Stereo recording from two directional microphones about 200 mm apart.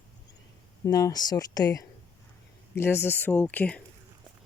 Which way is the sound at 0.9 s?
15° left (ahead or behind).